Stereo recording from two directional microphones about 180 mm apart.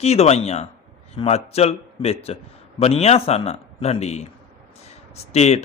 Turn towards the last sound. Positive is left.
turn(degrees=35)  # may be behind; listen again after turning